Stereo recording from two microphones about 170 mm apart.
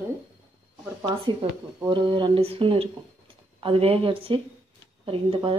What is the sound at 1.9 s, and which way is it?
Speech, 30° right (ahead or behind).